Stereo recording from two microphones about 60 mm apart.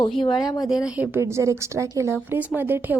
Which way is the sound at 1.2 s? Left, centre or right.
Right.